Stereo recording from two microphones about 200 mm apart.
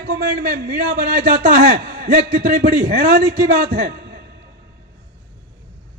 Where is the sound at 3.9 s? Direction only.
55° right (ahead or behind).